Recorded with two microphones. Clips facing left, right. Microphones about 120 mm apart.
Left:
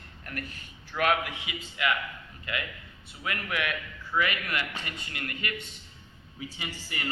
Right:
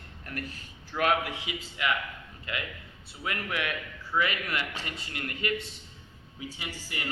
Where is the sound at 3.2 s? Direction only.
30° right (ahead or behind).